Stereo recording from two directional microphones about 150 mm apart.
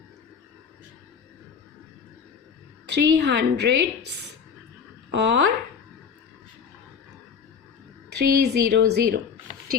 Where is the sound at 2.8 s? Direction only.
90° right.